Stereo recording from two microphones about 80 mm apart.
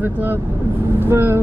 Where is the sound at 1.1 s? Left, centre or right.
Right.